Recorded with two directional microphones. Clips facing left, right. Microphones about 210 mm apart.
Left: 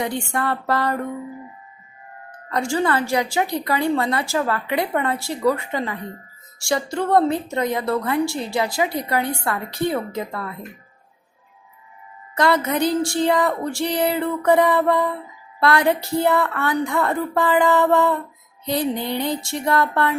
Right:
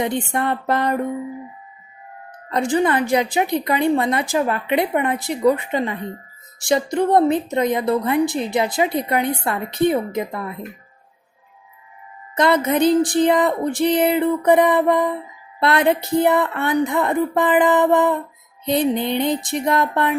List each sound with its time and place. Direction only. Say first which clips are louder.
0.0 s a woman's voice: right 3 dB; 20° right (ahead or behind)
2.5 s a woman's voice: right 3 dB; 20° right (ahead or behind)
12.3 s a woman's voice: right 2 dB; 20° right (ahead or behind)